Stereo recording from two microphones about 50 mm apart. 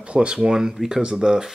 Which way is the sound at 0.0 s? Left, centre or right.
Centre.